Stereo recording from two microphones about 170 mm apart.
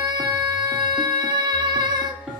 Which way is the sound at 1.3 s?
25° right (ahead or behind).